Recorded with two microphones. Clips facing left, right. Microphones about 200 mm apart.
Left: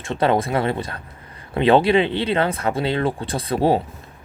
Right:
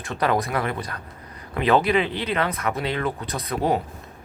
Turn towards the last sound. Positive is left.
turn(degrees=30)  # may be behind; listen again after turning